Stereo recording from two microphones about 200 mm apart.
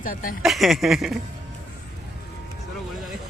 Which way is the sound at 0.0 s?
40° left (ahead or behind).